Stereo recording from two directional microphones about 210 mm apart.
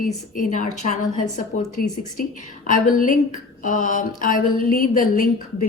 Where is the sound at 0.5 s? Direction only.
40° left (ahead or behind).